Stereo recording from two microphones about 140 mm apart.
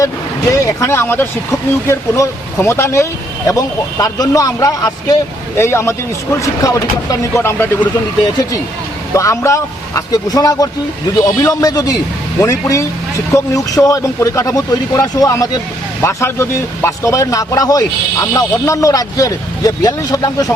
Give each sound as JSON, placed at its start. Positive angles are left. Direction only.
{"t": 0.0, "sound": "speech", "side_deg": 25}
{"t": 9.1, "sound": "speech", "side_deg": 20}